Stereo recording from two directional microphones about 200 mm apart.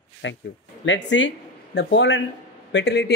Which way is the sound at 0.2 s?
65° left (ahead or behind).